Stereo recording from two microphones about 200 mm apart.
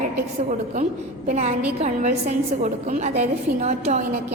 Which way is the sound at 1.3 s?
35° right (ahead or behind).